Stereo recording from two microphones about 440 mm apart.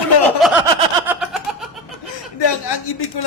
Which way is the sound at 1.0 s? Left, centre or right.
Centre.